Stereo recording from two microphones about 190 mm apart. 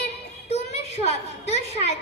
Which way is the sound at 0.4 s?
35° left (ahead or behind).